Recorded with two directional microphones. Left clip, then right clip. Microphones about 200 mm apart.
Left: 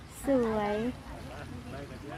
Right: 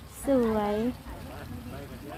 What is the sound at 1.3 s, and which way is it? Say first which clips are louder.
Vehicle: even; 50° right (ahead or behind).